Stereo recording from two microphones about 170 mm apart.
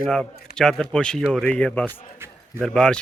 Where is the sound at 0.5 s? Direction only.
5° left (ahead or behind).